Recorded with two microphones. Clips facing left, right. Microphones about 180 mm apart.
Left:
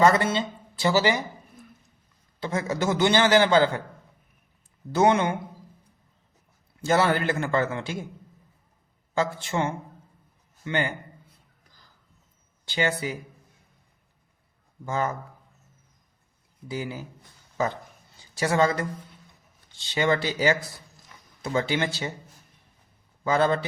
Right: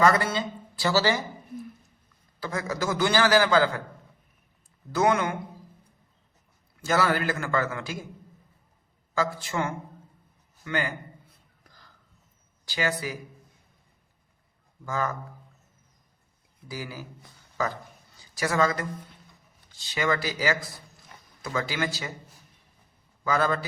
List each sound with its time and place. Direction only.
0.0 s speech: 25° left (ahead or behind)
2.4 s a man's voice: 25° left (ahead or behind)
4.9 s a man's voice: 25° left (ahead or behind)
6.8 s a man's voice: 25° left (ahead or behind)
9.1 s a man's voice: 25° left (ahead or behind)
12.6 s a man's voice: 25° left (ahead or behind)
14.8 s a man's voice: 25° left (ahead or behind)
16.6 s a man's voice: 25° left (ahead or behind)
18.3 s a man's voice: 25° left (ahead or behind)
23.2 s a man's voice: 25° left (ahead or behind)